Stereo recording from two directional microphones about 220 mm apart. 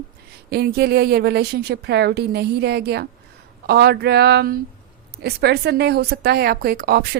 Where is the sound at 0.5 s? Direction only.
45° right (ahead or behind).